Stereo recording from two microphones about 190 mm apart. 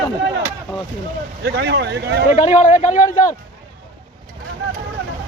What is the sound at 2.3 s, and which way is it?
A man's voice, 40° left (ahead or behind).